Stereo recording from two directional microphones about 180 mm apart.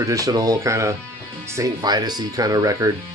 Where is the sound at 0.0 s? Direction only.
20° right (ahead or behind).